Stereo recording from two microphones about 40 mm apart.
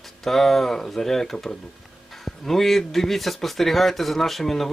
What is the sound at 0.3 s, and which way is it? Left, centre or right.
Speech, centre.